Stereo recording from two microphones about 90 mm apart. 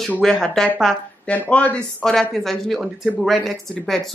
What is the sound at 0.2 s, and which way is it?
Speech, 5° left (ahead or behind).